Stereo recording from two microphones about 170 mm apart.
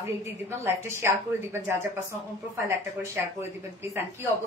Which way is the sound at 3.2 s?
10° right (ahead or behind).